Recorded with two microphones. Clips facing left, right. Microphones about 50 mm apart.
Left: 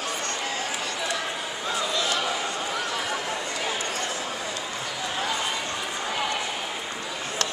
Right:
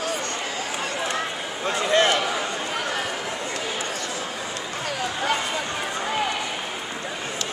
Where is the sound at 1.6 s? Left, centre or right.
Right.